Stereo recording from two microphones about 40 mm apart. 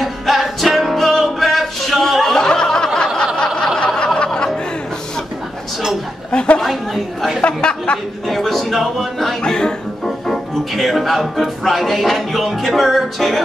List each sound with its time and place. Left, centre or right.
0.0 s music: centre
2.3 s a sound: centre
3.5 s snicker: centre
6.3 s a sound: left
6.6 s chatter: centre
7.4 s a sound: left
8.3 s music: centre
9.4 s speech: centre
10.0 s music: centre